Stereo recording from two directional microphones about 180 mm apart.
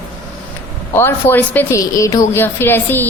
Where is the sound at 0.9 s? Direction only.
10° left (ahead or behind).